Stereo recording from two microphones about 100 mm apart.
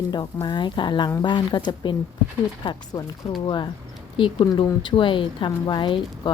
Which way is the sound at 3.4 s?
50° left (ahead or behind).